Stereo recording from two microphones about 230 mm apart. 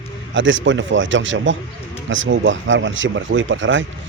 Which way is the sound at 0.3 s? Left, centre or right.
Right.